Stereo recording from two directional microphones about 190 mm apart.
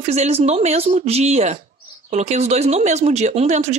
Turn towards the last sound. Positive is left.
turn(degrees=-35)  # may be behind; listen again after turning